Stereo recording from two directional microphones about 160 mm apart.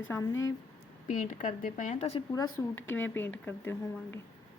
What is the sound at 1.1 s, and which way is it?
Speech, 50° left (ahead or behind).